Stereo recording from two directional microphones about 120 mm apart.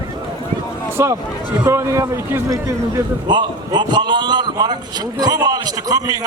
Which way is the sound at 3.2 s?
40° right (ahead or behind).